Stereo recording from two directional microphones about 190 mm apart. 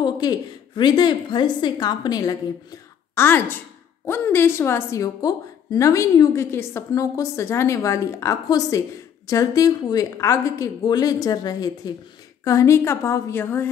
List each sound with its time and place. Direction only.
0.0 s a woman's voice: 25° left (ahead or behind)